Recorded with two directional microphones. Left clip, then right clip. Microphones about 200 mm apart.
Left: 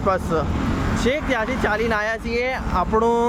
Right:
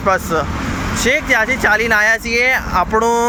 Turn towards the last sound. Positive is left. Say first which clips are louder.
# right 5 dB
turn(degrees=0)  # may be behind; listen again after turning